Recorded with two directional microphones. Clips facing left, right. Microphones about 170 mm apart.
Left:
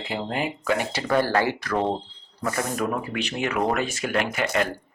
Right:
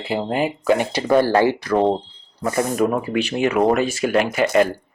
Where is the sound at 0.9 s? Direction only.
20° right (ahead or behind).